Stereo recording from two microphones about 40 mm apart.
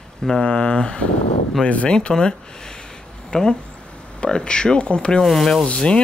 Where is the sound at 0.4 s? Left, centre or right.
Left.